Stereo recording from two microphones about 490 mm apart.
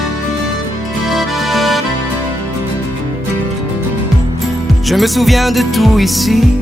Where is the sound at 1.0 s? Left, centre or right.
Centre.